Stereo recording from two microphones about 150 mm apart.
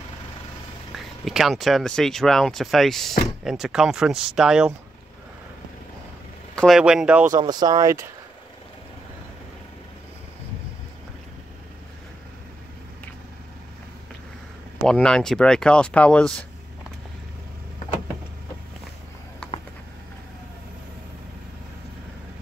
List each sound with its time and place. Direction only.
0.9 s speech: centre (ahead or behind)
6.5 s vehicle: 5° left (ahead or behind)
6.8 s speech: 5° right (ahead or behind)
7.3 s speech: 30° right (ahead or behind)
14.9 s speech: 5° left (ahead or behind)